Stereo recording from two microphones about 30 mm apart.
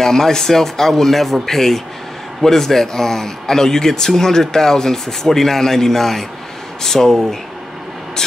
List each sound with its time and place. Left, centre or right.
0.0 s speech: centre